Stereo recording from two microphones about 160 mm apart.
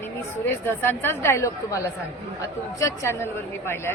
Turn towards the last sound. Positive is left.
turn(degrees=15)  # may be behind; listen again after turning